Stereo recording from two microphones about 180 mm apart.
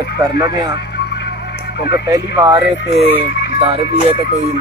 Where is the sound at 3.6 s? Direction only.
35° right (ahead or behind).